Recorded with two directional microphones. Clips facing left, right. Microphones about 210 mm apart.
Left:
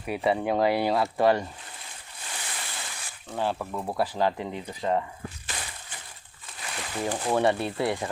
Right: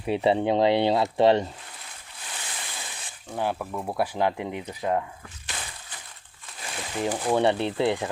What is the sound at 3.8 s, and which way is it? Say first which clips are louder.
Speech: right 1 dB; 10° right (ahead or behind).